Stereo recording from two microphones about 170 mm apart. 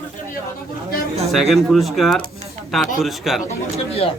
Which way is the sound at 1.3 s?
Centre (ahead or behind).